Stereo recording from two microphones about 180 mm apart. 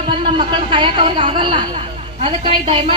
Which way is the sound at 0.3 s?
25° right (ahead or behind).